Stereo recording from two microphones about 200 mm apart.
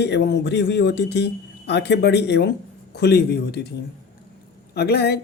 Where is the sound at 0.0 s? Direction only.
55° left (ahead or behind).